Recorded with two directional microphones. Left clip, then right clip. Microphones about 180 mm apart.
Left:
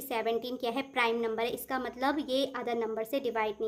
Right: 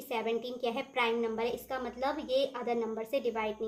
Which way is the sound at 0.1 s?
40° left (ahead or behind).